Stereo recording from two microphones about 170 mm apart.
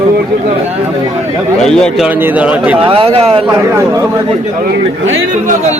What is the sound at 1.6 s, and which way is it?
Speech, 5° left (ahead or behind).